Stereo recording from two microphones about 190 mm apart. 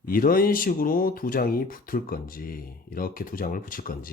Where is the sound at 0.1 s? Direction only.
50° left (ahead or behind).